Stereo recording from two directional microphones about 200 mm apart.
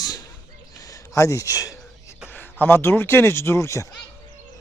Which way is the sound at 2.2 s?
10° left (ahead or behind).